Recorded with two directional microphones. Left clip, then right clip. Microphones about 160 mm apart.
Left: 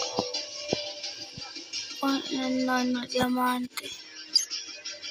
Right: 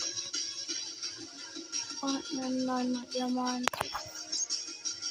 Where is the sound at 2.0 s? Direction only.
20° left (ahead or behind).